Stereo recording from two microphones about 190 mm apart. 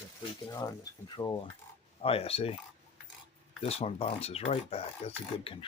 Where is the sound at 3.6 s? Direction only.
30° left (ahead or behind).